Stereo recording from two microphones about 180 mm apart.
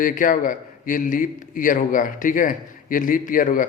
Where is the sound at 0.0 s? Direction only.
50° left (ahead or behind).